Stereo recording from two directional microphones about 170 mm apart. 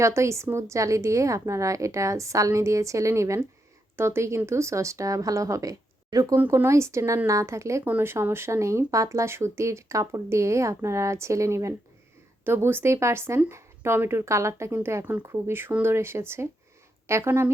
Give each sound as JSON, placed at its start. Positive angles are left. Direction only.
{"t": 0.0, "sound": "speech", "side_deg": -15}